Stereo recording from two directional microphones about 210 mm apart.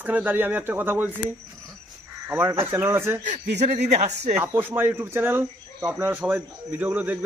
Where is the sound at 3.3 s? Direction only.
30° right (ahead or behind).